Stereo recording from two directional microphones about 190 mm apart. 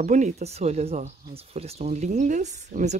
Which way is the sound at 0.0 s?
40° right (ahead or behind).